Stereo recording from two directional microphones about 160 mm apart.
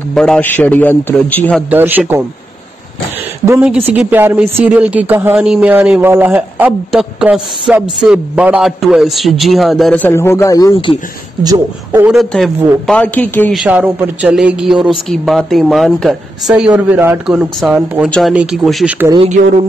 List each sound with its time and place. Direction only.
0.1 s a man's voice: 5° left (ahead or behind)
1.7 s speech: 10° right (ahead or behind)
3.6 s speech: 5° right (ahead or behind)
10.0 s a man's voice: 15° left (ahead or behind)
12.0 s speech: centre (ahead or behind)
13.5 s speech: 5° right (ahead or behind)
19.1 s speech: 45° right (ahead or behind)